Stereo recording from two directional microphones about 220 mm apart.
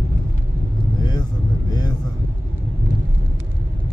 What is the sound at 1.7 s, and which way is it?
Vehicle, 20° left (ahead or behind).